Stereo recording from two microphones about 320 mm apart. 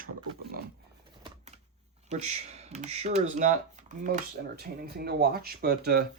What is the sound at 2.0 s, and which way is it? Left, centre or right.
Speech, right.